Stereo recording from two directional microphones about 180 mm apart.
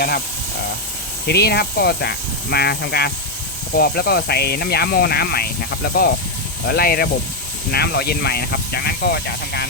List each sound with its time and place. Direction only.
1.3 s speech: 65° left (ahead or behind)